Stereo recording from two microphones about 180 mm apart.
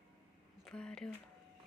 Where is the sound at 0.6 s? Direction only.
5° left (ahead or behind).